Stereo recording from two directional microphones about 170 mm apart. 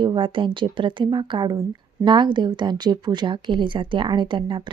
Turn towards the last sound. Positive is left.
turn(degrees=-30)  # may be behind; listen again after turning